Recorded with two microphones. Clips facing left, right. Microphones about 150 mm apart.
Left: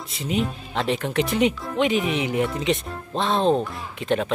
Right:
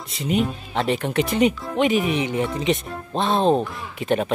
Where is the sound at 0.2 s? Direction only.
Centre (ahead or behind).